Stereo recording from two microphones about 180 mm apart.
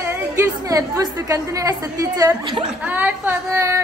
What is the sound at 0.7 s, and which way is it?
A woman's voice, 20° right (ahead or behind).